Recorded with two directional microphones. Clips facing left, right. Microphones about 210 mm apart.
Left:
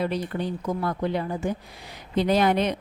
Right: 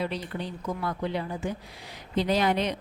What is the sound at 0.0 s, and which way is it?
Speech, 50° left (ahead or behind).